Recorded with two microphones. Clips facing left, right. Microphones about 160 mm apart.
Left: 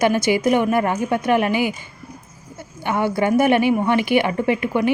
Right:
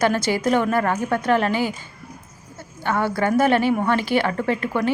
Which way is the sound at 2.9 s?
15° left (ahead or behind).